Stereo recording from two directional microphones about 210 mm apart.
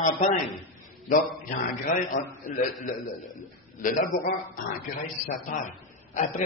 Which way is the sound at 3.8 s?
40° left (ahead or behind).